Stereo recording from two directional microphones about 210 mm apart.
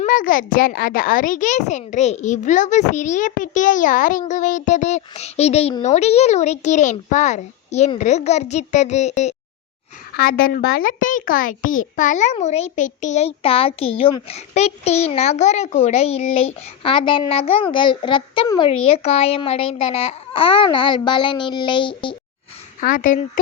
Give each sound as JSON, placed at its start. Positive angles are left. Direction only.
{"t": 0.0, "sound": "a child's voice", "side_deg": 40}
{"t": 10.2, "sound": "a child's voice", "side_deg": 45}
{"t": 22.8, "sound": "a child's voice", "side_deg": 40}